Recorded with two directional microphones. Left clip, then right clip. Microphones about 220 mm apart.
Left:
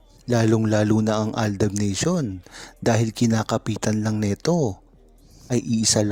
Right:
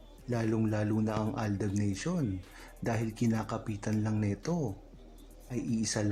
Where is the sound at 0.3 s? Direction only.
40° left (ahead or behind).